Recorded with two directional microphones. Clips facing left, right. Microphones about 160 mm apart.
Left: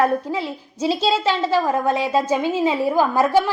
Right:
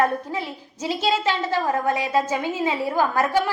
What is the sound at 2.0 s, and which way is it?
A woman's voice, 15° left (ahead or behind).